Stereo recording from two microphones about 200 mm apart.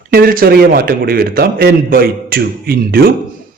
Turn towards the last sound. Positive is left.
turn(degrees=-50)  # may be behind; listen again after turning